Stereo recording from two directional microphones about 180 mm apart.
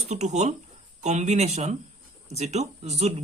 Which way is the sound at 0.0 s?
40° right (ahead or behind).